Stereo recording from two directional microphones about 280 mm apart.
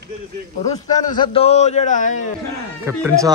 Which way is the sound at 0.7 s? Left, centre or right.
Centre.